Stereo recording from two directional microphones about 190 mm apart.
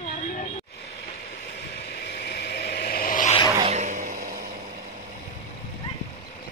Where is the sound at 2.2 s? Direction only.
60° left (ahead or behind).